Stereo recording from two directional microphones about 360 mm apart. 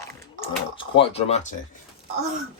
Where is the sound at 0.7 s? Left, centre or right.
Centre.